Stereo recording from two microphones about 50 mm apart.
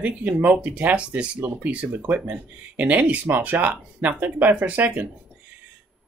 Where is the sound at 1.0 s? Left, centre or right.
Right.